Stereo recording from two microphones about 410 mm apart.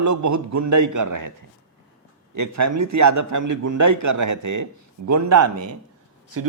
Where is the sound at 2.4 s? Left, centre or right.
Right.